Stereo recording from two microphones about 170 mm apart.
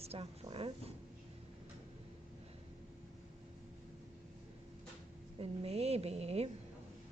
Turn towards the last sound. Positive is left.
turn(degrees=-40)  # may be behind; listen again after turning